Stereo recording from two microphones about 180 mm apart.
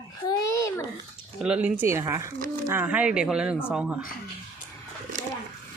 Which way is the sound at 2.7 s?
10° right (ahead or behind).